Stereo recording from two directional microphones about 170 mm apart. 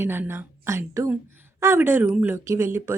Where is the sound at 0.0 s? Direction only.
15° right (ahead or behind).